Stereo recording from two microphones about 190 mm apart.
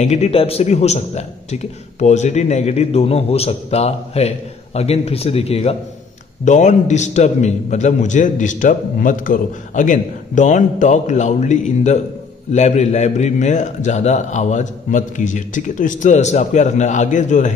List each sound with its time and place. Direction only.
0.0 s a man's voice: 35° left (ahead or behind)